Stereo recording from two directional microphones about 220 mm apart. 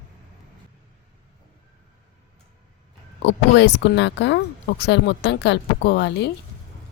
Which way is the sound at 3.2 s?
50° left (ahead or behind).